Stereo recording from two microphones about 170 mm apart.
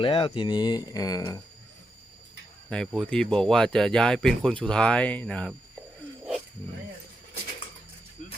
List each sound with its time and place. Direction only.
0.0 s speech: 30° left (ahead or behind)
2.6 s speech: 5° left (ahead or behind)
8.2 s music: 45° left (ahead or behind)